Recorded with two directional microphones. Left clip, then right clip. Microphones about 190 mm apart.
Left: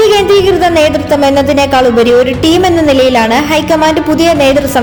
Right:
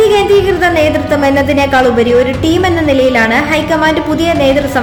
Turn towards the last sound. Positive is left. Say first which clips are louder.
# left 2 dB
turn(degrees=30)  # may be behind; listen again after turning